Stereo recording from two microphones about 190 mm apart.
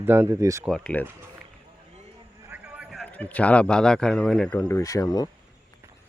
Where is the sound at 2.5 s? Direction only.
5° right (ahead or behind); by 5.2 s 20° left (ahead or behind).